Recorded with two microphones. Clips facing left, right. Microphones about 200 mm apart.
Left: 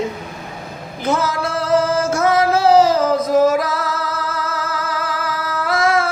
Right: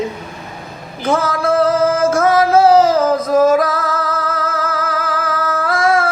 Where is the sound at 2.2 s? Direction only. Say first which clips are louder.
Right 1 dB; 30° right (ahead or behind).